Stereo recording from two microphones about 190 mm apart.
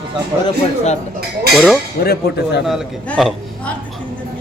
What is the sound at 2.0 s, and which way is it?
Speech, 55° left (ahead or behind).